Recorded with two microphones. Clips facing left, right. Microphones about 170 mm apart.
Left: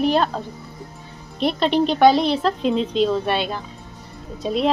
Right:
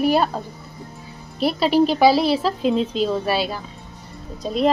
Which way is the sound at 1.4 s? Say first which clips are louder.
Right 1 dB; 5° right (ahead or behind).